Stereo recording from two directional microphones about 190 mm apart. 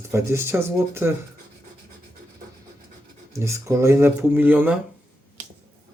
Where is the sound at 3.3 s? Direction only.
15° right (ahead or behind).